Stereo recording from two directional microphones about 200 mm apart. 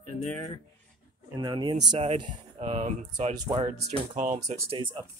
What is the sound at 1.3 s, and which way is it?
Speech, 20° right (ahead or behind).